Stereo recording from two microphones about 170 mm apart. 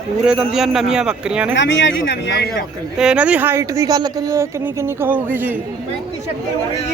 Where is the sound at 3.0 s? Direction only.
5° right (ahead or behind).